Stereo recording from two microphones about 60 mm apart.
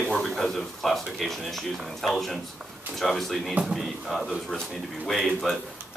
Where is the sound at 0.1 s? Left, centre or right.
Centre.